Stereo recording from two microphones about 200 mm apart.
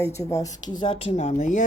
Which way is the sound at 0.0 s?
15° left (ahead or behind).